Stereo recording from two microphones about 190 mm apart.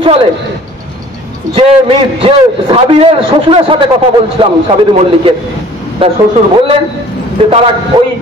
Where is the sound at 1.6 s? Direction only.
30° right (ahead or behind).